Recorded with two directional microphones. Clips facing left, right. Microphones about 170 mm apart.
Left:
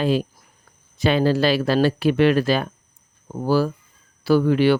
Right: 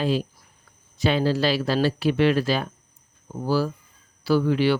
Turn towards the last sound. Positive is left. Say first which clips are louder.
# left 4 dB
turn(degrees=55)  # may be behind; listen again after turning